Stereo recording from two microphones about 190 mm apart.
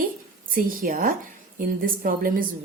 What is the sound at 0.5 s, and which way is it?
A woman's voice, 50° right (ahead or behind).